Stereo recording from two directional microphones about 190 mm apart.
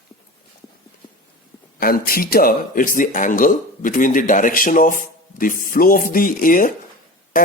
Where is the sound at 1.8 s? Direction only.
50° left (ahead or behind).